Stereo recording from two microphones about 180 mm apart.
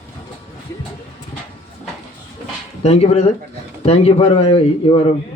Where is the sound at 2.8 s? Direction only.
35° left (ahead or behind).